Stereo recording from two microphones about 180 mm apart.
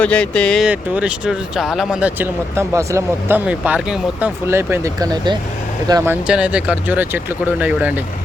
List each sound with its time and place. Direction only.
0.0 s speech: 5° left (ahead or behind)
0.7 s speech: 5° right (ahead or behind)
6.2 s speech: 5° right (ahead or behind)